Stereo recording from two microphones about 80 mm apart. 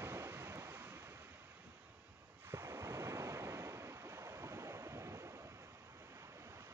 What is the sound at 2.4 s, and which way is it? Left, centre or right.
Waves, right.